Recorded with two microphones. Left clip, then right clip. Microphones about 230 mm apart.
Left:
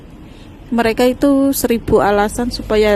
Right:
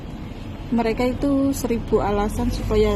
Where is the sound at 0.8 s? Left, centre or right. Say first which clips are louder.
Left 9 dB; left.